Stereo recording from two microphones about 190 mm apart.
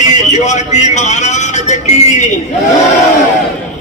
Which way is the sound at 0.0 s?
40° left (ahead or behind).